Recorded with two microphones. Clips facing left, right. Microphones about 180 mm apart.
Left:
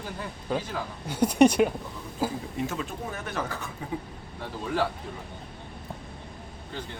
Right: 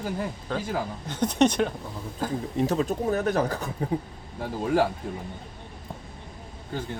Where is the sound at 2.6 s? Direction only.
40° right (ahead or behind).